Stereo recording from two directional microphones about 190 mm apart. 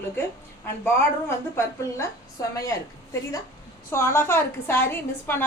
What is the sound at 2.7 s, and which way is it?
A woman's voice, 15° left (ahead or behind).